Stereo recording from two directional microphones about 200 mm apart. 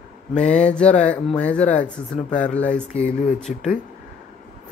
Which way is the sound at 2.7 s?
35° left (ahead or behind).